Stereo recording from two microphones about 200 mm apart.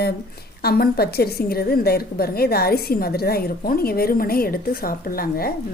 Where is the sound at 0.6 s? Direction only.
50° left (ahead or behind).